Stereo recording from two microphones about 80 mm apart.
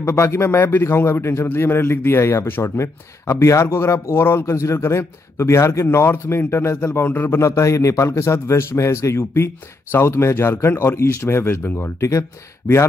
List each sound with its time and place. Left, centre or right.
0.0 s a man's voice: left